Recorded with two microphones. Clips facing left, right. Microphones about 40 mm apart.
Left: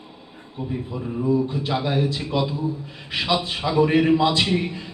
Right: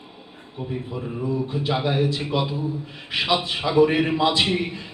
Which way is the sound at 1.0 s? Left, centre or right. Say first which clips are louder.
Left 6 dB; centre.